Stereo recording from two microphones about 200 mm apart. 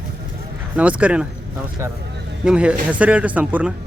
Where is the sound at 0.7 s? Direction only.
5° right (ahead or behind).